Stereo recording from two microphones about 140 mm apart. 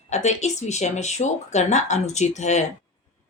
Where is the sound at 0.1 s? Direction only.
55° left (ahead or behind).